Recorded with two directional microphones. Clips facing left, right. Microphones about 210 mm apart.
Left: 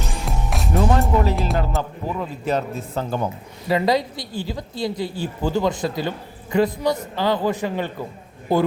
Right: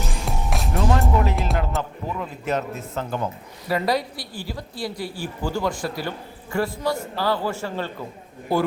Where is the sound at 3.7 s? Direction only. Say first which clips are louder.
Left 3 dB; 20° left (ahead or behind).